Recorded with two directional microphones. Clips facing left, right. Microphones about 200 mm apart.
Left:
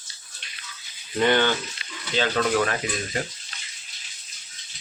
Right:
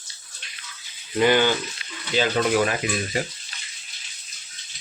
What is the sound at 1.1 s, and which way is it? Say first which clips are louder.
Speech: right 2 dB; 10° right (ahead or behind).